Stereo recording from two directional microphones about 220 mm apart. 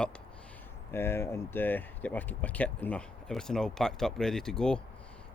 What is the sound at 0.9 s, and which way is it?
Speech, 10° left (ahead or behind).